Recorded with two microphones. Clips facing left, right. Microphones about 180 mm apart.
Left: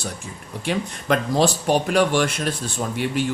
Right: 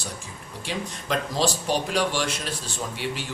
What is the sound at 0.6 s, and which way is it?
Speech, 55° left (ahead or behind).